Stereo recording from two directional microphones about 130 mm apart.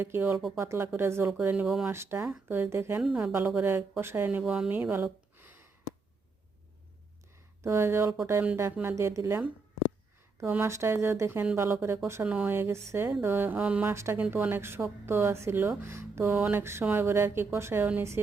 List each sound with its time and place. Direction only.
0.0 s speech: 20° right (ahead or behind)
1.3 s speech: 10° right (ahead or behind)
1.9 s speech: 20° right (ahead or behind)
3.0 s speech: 5° right (ahead or behind)
3.5 s speech: 15° right (ahead or behind)
5.4 s a sound: 15° right (ahead or behind)
7.6 s speech: 20° right (ahead or behind)